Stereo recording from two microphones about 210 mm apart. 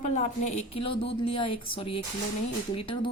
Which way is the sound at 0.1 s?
35° left (ahead or behind).